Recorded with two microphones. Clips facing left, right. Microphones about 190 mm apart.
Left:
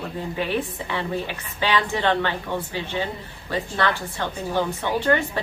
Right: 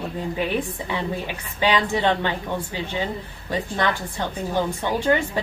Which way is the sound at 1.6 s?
15° right (ahead or behind).